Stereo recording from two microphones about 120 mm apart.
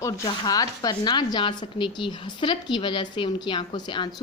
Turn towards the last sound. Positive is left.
turn(degrees=40)  # may be behind; listen again after turning